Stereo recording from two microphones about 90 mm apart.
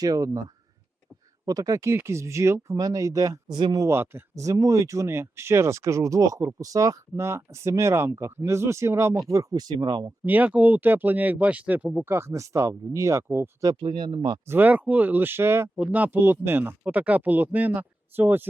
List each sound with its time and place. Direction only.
0.0 s speech: 40° right (ahead or behind)
1.5 s speech: 40° right (ahead or behind)
3.5 s speech: 55° right (ahead or behind)
3.8 s speech: 30° right (ahead or behind)
4.4 s speech: 40° right (ahead or behind)
10.2 s speech: 20° right (ahead or behind)
12.0 s speech: 30° right (ahead or behind)
13.8 s speech: 65° right (ahead or behind)
14.4 s speech: 25° right (ahead or behind)
15.8 s speech: 15° right (ahead or behind)